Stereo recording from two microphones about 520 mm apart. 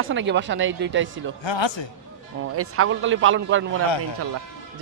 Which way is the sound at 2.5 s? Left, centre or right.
Right.